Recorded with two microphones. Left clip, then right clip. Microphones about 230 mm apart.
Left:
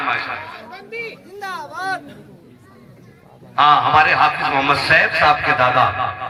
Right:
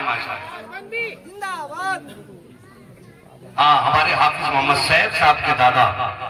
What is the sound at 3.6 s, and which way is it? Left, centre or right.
A man's voice, right.